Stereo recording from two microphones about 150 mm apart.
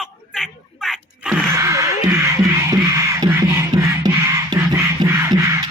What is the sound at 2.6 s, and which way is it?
Music, 20° right (ahead or behind).